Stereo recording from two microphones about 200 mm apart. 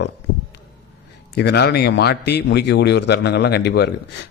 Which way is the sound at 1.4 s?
55° left (ahead or behind).